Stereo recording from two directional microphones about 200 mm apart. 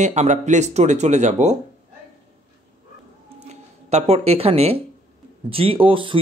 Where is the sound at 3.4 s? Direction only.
35° right (ahead or behind).